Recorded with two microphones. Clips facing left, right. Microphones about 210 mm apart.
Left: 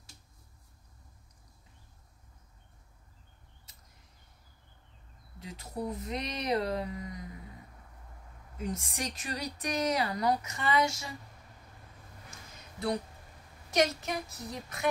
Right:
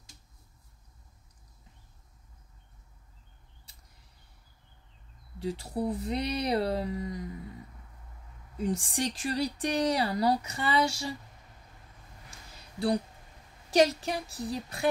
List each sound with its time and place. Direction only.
5.4 s speech: 30° right (ahead or behind)
8.5 s speech: 30° right (ahead or behind)
12.5 s a sound: 35° right (ahead or behind)
13.7 s speech: 30° right (ahead or behind)